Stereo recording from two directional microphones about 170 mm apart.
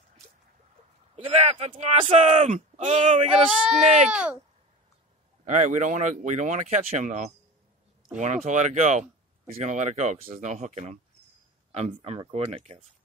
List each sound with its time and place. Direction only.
1.1 s speech: 40° right (ahead or behind)
4.1 s speech: 5° right (ahead or behind)
5.4 s speech: 45° right (ahead or behind)
8.5 s speech: 45° right (ahead or behind)